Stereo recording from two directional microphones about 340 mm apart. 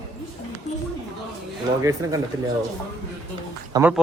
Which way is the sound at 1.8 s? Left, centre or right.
Centre.